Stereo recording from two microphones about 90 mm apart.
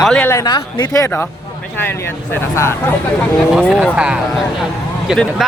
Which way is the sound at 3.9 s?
10° right (ahead or behind).